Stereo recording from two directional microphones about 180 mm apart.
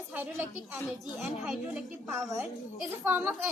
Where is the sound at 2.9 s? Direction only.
10° right (ahead or behind).